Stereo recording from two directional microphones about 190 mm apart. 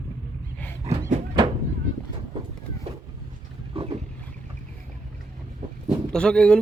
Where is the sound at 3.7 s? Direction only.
30° right (ahead or behind).